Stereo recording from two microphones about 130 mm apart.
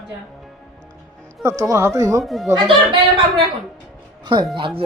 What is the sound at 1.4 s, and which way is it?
Speech, 25° right (ahead or behind).